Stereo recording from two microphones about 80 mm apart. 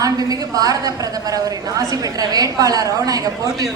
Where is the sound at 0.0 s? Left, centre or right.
Right.